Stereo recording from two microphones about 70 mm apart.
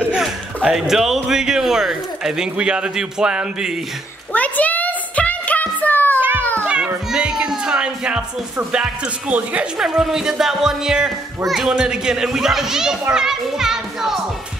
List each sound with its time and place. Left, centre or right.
0.6 s speech: centre
4.3 s a sound: left
6.1 s cat: right
7.1 s music: centre
8.7 s speech: centre
9.8 s speech: centre
13.1 s children playing: centre